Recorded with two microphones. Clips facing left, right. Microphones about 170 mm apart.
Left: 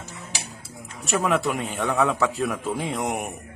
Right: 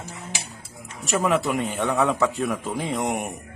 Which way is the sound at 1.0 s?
Centre (ahead or behind).